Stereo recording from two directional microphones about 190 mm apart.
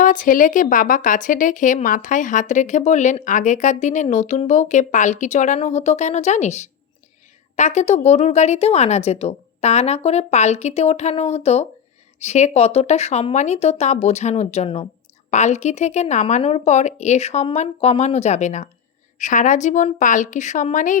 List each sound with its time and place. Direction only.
0.0 s speech: 45° left (ahead or behind)